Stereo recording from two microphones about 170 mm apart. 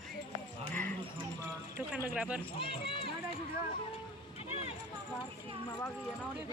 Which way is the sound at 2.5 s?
30° left (ahead or behind).